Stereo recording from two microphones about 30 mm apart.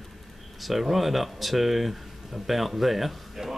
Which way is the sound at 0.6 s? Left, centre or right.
Centre.